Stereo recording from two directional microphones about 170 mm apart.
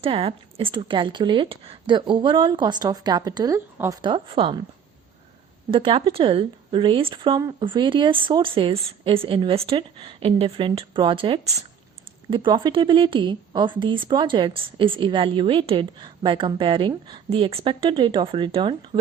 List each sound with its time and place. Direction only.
0.0 s speech: 35° right (ahead or behind); by 3.9 s 20° right (ahead or behind)
4.0 s speech: 30° right (ahead or behind)
5.7 s speech: 30° right (ahead or behind)